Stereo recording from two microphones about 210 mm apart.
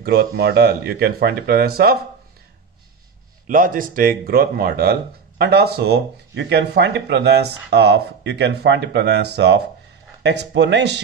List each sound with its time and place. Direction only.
0.0 s speech: 50° right (ahead or behind)
3.4 s speech: 40° right (ahead or behind)